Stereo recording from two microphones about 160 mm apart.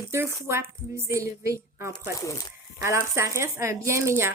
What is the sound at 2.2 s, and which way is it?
Speech, 20° left (ahead or behind).